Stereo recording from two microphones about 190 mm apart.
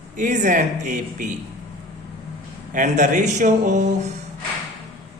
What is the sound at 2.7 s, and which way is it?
A man's voice, 40° right (ahead or behind).